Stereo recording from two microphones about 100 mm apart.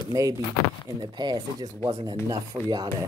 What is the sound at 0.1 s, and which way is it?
Speech, 35° right (ahead or behind).